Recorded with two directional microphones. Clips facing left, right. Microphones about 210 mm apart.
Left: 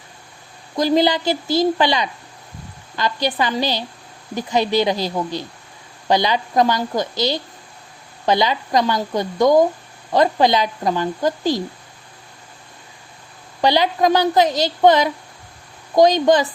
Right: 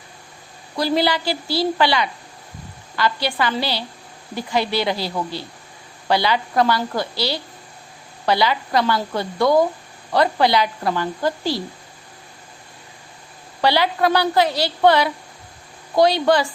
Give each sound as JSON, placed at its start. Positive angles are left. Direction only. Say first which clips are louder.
{"t": 0.8, "sound": "a woman's voice", "louder": "left 3 dB", "side_deg": 20}
{"t": 13.6, "sound": "a woman's voice", "louder": "left 2 dB", "side_deg": 15}